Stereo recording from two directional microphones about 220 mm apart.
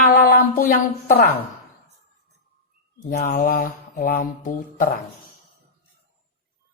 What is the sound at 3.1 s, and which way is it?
A man's voice, 40° left (ahead or behind).